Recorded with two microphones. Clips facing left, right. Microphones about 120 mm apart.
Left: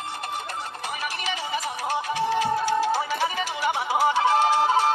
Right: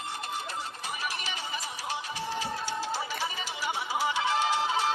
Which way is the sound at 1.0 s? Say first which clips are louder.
Left 6 dB; 85° left.